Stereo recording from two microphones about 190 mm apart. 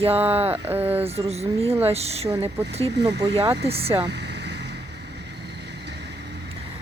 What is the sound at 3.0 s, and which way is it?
Speech, 65° right (ahead or behind).